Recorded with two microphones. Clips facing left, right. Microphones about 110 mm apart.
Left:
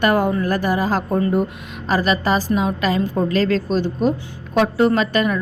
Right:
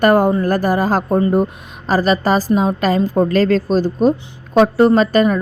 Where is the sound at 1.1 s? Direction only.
30° right (ahead or behind).